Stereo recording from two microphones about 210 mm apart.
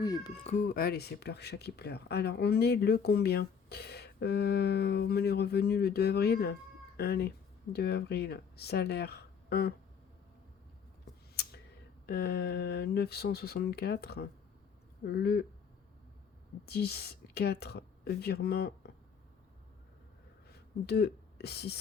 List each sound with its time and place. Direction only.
0.0 s speech: 20° left (ahead or behind)
0.4 s speech: 40° left (ahead or behind)
12.0 s speech: 50° left (ahead or behind)
16.6 s a woman's voice: 50° left (ahead or behind)
20.8 s speech: 50° left (ahead or behind)